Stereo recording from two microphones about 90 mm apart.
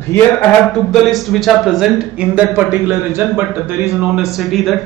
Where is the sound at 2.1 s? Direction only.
15° right (ahead or behind).